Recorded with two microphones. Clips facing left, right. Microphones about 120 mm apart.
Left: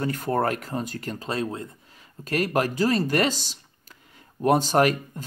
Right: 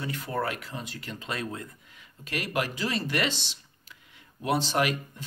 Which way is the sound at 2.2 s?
40° left (ahead or behind).